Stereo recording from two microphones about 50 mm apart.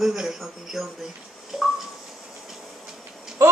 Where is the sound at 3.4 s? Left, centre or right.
Right.